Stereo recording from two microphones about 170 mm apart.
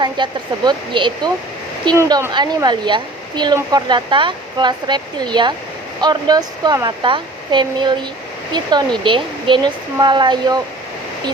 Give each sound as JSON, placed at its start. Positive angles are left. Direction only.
{"t": 0.0, "sound": "speech", "side_deg": -25}